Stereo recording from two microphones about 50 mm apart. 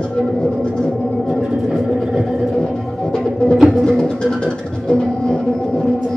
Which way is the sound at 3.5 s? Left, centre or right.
Centre.